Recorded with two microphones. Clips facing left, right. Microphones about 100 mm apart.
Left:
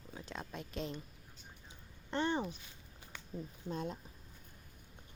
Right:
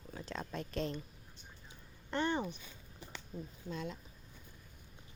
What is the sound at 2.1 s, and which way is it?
Speech, 30° left (ahead or behind).